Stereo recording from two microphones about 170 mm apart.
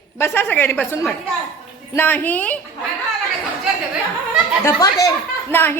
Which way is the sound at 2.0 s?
10° left (ahead or behind).